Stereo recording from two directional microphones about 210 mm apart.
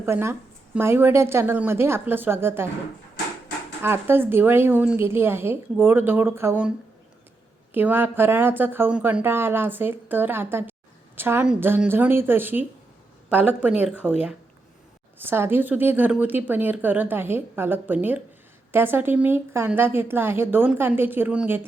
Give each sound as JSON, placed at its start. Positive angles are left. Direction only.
{"t": 0.0, "sound": "speech", "side_deg": -10}
{"t": 3.8, "sound": "speech", "side_deg": -10}
{"t": 15.2, "sound": "speech", "side_deg": -10}